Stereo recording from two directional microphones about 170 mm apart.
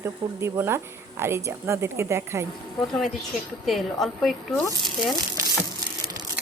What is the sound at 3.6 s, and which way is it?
A woman's voice, centre (ahead or behind).